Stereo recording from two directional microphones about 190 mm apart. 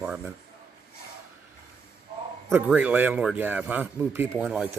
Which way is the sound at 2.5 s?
10° right (ahead or behind).